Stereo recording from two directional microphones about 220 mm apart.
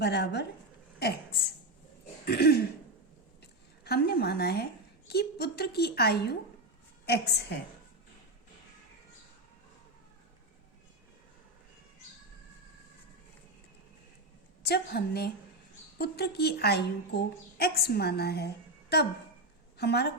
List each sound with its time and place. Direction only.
0.0 s a woman's voice: 50° left (ahead or behind)
2.2 s cough: 45° left (ahead or behind)
3.4 s a sound: 45° left (ahead or behind)
7.0 s a woman's voice: 50° left (ahead or behind)
14.6 s a woman's voice: 45° left (ahead or behind)